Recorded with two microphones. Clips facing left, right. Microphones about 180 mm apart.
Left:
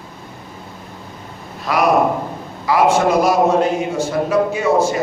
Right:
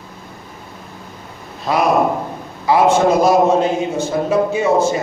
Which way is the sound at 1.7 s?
25° right (ahead or behind).